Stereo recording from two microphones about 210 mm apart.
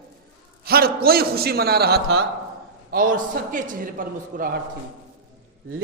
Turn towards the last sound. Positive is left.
turn(degrees=-40)  # may be behind; listen again after turning